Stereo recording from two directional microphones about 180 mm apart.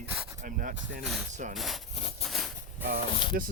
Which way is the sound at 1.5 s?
Centre (ahead or behind).